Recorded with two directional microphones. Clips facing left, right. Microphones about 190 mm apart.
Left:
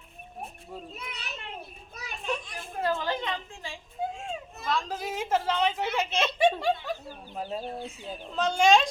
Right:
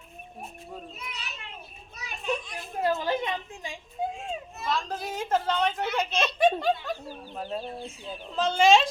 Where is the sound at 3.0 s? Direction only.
20° right (ahead or behind).